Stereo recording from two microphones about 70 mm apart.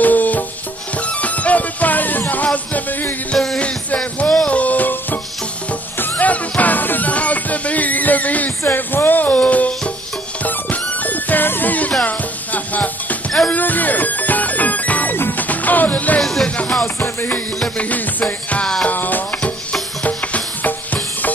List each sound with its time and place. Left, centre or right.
0.0 s music: left
16.2 s music: centre
16.4 s music: centre
17.0 s music: left